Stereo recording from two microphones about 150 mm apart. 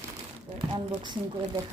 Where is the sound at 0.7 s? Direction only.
35° right (ahead or behind).